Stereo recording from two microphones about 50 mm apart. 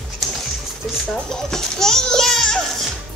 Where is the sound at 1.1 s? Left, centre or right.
Centre.